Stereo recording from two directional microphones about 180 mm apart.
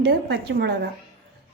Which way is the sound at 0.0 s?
70° right (ahead or behind).